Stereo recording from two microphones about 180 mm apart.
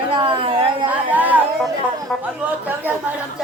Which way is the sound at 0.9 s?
10° right (ahead or behind).